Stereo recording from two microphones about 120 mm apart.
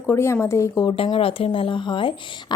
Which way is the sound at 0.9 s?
50° left (ahead or behind).